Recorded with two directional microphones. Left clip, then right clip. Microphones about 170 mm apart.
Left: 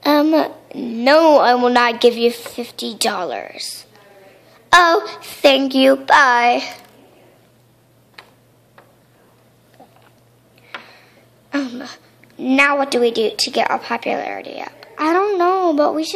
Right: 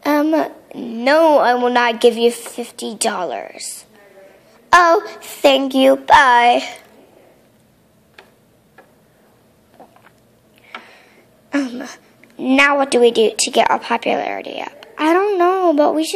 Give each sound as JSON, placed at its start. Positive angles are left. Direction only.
{"t": 0.0, "sound": "babbling", "side_deg": 5}
{"t": 0.7, "sound": "a woman's voice", "side_deg": 15}
{"t": 1.6, "sound": "a woman's voice", "side_deg": 5}
{"t": 11.8, "sound": "a sound", "side_deg": -15}
{"t": 12.4, "sound": "a woman's voice", "side_deg": 0}
{"t": 15.2, "sound": "a woman's voice", "side_deg": 5}